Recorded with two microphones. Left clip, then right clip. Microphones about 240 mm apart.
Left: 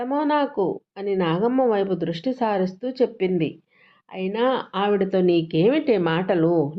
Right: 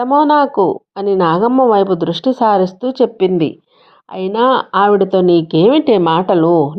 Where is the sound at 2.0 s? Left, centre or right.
Right.